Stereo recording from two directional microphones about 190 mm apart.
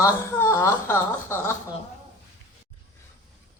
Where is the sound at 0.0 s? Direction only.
15° left (ahead or behind).